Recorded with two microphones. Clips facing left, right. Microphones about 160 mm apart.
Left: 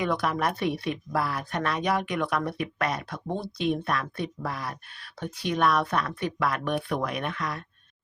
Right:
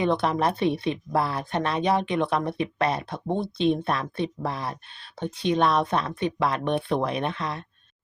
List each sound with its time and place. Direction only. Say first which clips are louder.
0.0 s a woman's voice: right 4 dB; 25° right (ahead or behind)